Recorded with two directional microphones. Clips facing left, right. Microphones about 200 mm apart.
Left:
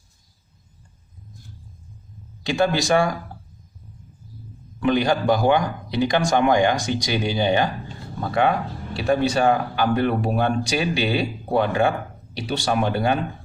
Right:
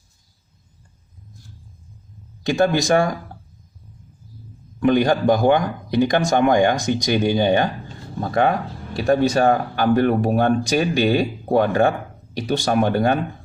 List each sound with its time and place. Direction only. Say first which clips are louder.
2.5 s speech: right 2 dB; 45° right (ahead or behind)
4.8 s a man's voice: right 3 dB; 50° right (ahead or behind)